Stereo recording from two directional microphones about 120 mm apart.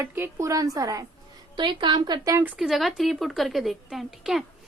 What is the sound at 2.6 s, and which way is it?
A woman's voice, centre (ahead or behind).